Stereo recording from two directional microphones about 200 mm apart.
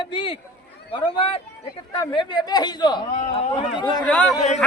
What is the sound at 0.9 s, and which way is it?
Speech, 25° left (ahead or behind).